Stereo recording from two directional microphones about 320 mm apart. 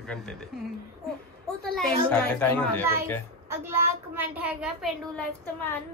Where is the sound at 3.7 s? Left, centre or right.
Centre.